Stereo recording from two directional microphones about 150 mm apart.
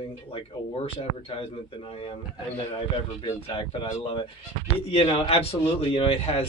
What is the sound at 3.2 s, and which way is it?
Speech, 40° left (ahead or behind).